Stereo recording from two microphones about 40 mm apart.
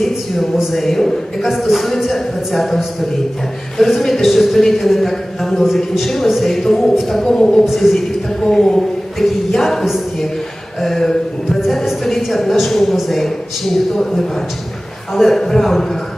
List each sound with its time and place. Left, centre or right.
0.0 s a woman's voice: centre
1.5 s a woman's voice: centre
7.2 s a man's voice: centre
7.6 s a woman's voice: centre
11.4 s a woman's voice: centre